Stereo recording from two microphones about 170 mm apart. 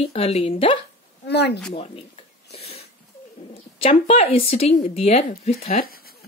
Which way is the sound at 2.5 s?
35° left (ahead or behind).